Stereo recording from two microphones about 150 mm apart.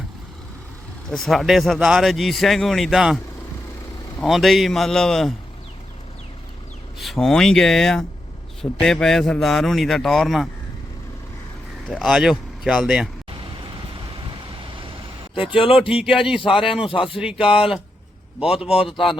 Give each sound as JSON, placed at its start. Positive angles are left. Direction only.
{"t": 1.1, "sound": "a man's voice", "side_deg": 0}
{"t": 4.2, "sound": "a man's voice", "side_deg": 0}
{"t": 7.0, "sound": "a man's voice", "side_deg": 0}
{"t": 11.9, "sound": "a man's voice", "side_deg": 0}
{"t": 15.5, "sound": "speech", "side_deg": 35}
{"t": 15.9, "sound": "a man's voice", "side_deg": -5}